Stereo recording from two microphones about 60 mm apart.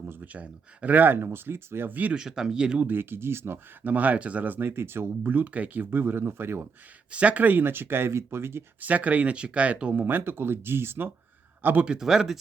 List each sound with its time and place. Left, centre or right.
0.3 s speech: right
2.1 s speech: centre
2.8 s speech: right
3.8 s speech: right
4.7 s speech: right
7.1 s speech: right
8.8 s speech: right
9.9 s speech: right
11.6 s speech: right
11.9 s speech: centre